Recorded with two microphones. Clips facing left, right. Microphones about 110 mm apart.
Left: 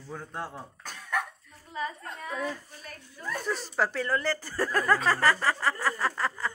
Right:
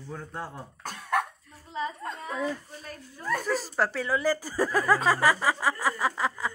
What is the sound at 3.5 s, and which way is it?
Speech, centre (ahead or behind).